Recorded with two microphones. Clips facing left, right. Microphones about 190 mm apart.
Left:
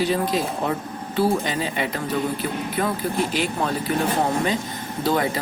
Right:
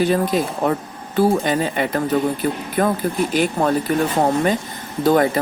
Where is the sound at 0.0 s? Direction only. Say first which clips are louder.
Right 4 dB; 50° right (ahead or behind).